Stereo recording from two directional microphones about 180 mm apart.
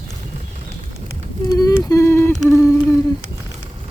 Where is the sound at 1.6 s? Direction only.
20° left (ahead or behind).